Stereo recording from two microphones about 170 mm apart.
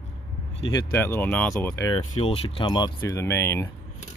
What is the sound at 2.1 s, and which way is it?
Speech, 35° left (ahead or behind).